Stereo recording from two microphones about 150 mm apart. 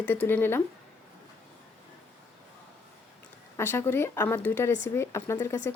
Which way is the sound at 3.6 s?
15° left (ahead or behind).